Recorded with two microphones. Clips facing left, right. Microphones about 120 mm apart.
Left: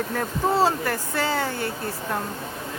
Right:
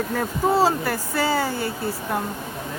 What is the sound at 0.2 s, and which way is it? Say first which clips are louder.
Speech: right 2 dB; 5° right (ahead or behind).